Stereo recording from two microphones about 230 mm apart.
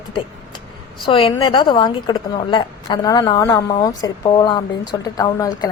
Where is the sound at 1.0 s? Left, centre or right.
Left.